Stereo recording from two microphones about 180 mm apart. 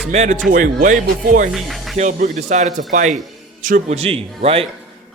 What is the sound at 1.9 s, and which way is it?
Speech, 45° right (ahead or behind).